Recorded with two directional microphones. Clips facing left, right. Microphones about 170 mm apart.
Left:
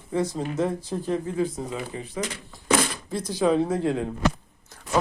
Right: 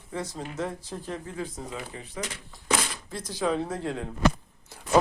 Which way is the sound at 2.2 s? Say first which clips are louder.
Left 4 dB; 90° left.